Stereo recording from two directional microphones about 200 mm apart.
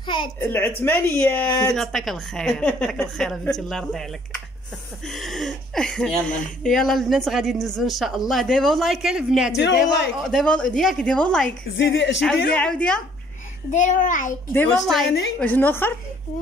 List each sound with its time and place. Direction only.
0.0 s a child's voice: 25° left (ahead or behind)
0.4 s speech: 10° left (ahead or behind)
9.6 s speech: 60° left (ahead or behind)
10.2 s speech: 5° left (ahead or behind)
11.8 s speech: 60° left (ahead or behind)
12.5 s speech: 5° left (ahead or behind)
13.7 s a child's voice: 40° left (ahead or behind)
14.5 s speech: 10° left (ahead or behind)